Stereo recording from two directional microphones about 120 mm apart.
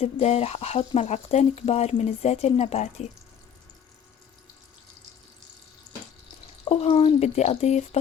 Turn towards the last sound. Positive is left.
turn(degrees=65)  # may be behind; listen again after turning